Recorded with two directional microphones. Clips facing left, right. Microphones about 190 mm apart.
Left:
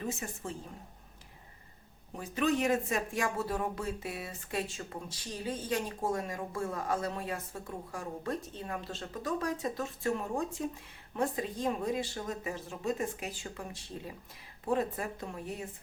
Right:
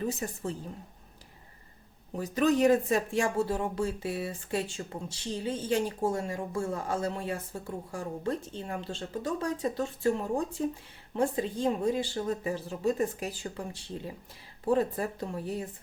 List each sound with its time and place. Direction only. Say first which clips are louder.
0.0 s speech: right 5 dB; 35° right (ahead or behind)
2.1 s speech: right 5 dB; 40° right (ahead or behind)